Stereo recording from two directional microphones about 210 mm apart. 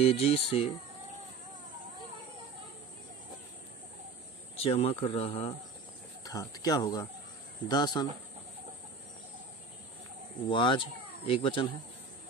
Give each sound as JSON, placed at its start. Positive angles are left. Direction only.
{"t": 0.0, "sound": "speech", "side_deg": 25}
{"t": 4.6, "sound": "speech", "side_deg": 30}
{"t": 10.5, "sound": "speech", "side_deg": 25}